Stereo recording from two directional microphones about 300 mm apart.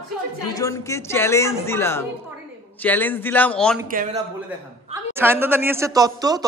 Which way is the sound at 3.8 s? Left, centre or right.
Right.